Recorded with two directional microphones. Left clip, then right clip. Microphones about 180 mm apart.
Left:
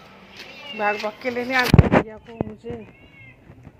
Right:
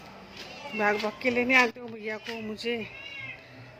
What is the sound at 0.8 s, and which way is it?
A man's voice, 15° right (ahead or behind).